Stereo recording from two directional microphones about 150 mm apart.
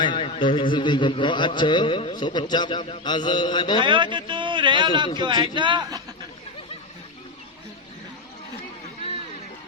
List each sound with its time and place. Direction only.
0.0 s speech: 35° left (ahead or behind)
3.8 s a man's voice: 30° right (ahead or behind)